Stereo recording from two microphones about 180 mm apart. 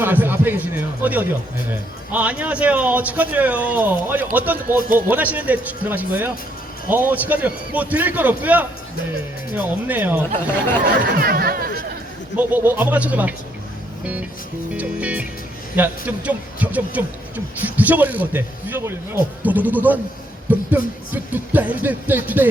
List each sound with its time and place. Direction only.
0.0 s speech: 10° right (ahead or behind)
11.1 s speech: 55° right (ahead or behind)
12.4 s speech: 10° right (ahead or behind)